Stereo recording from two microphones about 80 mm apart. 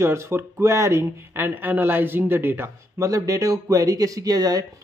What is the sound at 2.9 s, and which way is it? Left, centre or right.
Speech, right.